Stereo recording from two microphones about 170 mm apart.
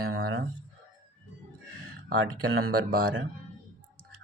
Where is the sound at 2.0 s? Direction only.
60° right (ahead or behind).